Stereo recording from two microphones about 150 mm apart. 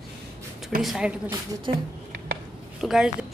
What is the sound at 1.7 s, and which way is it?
Speech, 35° right (ahead or behind).